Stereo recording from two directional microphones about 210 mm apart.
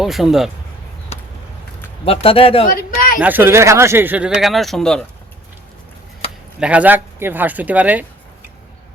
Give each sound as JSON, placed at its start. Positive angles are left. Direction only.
{"t": 0.0, "sound": "speech", "side_deg": 0}
{"t": 1.1, "sound": "a sound", "side_deg": 30}
{"t": 2.0, "sound": "speech", "side_deg": 25}
{"t": 2.6, "sound": "a sound", "side_deg": 40}
{"t": 3.2, "sound": "speech", "side_deg": -10}
{"t": 6.6, "sound": "speech", "side_deg": -5}